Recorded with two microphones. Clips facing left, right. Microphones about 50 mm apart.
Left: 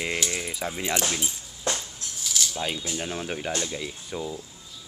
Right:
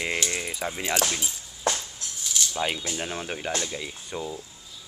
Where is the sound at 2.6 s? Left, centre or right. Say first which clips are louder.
Right 5 dB; centre.